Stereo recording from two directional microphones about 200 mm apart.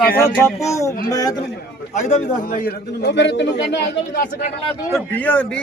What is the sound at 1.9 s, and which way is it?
A man's voice, 35° left (ahead or behind).